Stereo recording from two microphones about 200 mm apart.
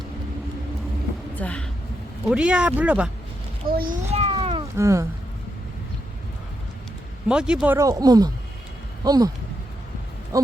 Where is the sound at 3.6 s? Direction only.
50° right (ahead or behind).